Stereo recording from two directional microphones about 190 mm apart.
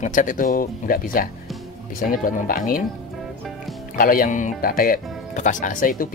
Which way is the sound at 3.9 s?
50° left (ahead or behind).